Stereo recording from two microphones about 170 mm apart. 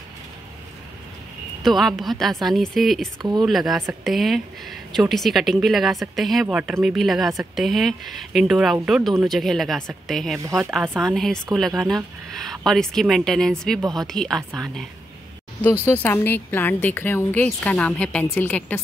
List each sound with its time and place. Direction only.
1.6 s speech: centre (ahead or behind)
3.2 s speech: 25° right (ahead or behind)
3.4 s speech: centre (ahead or behind)
6.4 s a woman's voice: 10° right (ahead or behind); by 18.8 s 10° left (ahead or behind)